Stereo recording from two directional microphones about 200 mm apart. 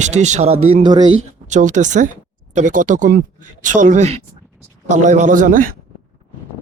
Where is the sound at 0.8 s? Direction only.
20° right (ahead or behind).